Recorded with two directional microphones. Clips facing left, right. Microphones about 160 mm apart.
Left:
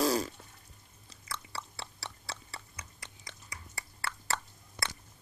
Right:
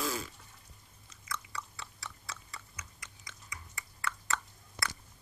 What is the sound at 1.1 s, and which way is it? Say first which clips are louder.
Chewing: even; 35° left (ahead or behind).